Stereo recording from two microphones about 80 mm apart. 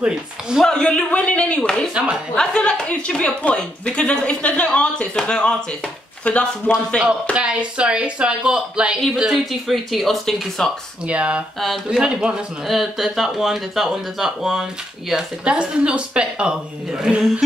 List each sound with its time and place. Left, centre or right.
0.0 s speech: centre
0.7 s speech: centre
6.2 s speech: left
7.3 s speech: centre
11.1 s speech: centre